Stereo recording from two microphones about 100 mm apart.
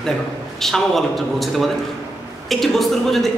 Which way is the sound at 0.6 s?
5° left (ahead or behind).